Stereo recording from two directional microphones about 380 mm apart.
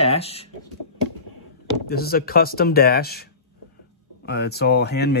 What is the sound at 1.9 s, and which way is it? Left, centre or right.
Speech, left.